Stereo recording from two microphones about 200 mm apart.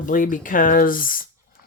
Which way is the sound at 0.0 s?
40° left (ahead or behind).